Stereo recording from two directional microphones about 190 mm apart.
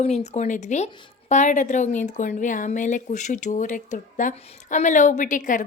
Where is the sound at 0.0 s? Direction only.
35° left (ahead or behind).